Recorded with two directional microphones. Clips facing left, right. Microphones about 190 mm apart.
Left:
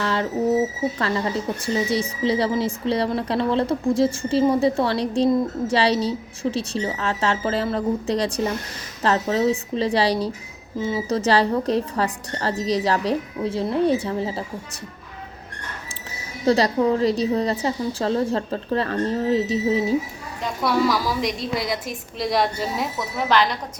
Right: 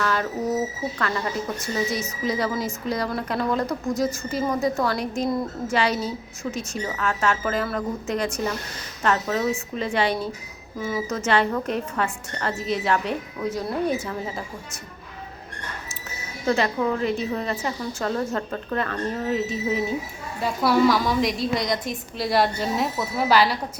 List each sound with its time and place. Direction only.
0.0 s bird: 25° left (ahead or behind)
0.9 s a woman's voice: 25° left (ahead or behind)
16.5 s a woman's voice: 35° left (ahead or behind)
20.4 s a woman's voice: centre (ahead or behind)